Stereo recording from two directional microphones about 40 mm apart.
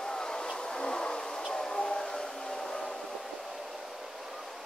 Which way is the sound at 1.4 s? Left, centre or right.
Centre.